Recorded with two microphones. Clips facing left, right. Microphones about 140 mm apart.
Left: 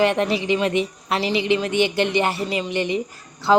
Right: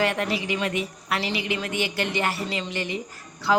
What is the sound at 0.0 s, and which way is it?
A woman's voice, 25° left (ahead or behind).